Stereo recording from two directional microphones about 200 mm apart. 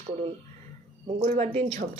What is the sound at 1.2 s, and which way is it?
Speech, 30° right (ahead or behind).